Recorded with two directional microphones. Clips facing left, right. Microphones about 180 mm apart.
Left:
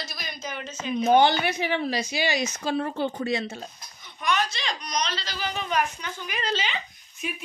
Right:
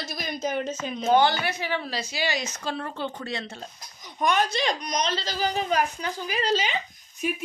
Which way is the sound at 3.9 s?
40° right (ahead or behind).